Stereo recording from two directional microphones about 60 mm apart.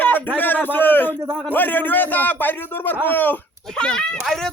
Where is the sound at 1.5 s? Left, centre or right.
Left.